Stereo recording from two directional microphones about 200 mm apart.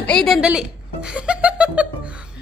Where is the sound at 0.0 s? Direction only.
5° left (ahead or behind).